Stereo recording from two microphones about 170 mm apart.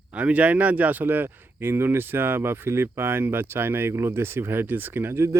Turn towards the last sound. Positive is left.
turn(degrees=-15)  # may be behind; listen again after turning